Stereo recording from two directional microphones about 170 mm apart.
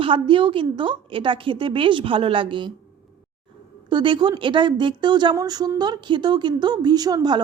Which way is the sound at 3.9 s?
25° right (ahead or behind).